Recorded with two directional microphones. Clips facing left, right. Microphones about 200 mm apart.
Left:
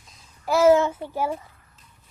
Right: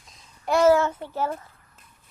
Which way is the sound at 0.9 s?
10° left (ahead or behind).